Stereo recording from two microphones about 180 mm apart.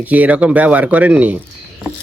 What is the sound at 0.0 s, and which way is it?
Speech, 10° right (ahead or behind).